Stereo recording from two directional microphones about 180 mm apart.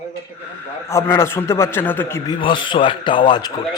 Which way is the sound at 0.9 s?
15° left (ahead or behind).